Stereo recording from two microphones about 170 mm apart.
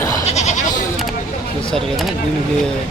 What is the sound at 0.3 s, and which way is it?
Goat, 40° left (ahead or behind).